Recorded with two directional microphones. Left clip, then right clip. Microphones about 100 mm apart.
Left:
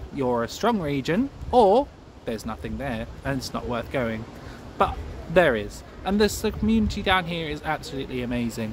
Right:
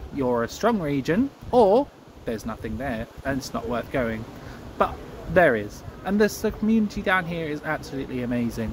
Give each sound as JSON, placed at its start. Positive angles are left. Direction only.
{"t": 0.2, "sound": "speech", "side_deg": 15}